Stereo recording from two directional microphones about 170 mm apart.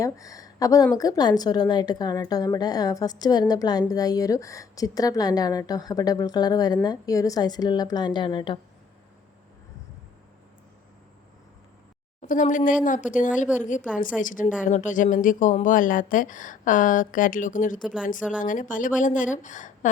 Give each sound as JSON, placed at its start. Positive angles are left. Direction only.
{"t": 0.0, "sound": "a woman's voice", "side_deg": 20}
{"t": 12.2, "sound": "speech", "side_deg": 50}